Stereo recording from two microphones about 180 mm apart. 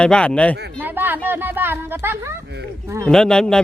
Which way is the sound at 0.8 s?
10° right (ahead or behind).